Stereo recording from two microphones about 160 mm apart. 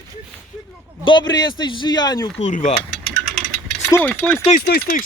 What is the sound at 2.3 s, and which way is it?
Speech, 50° left (ahead or behind).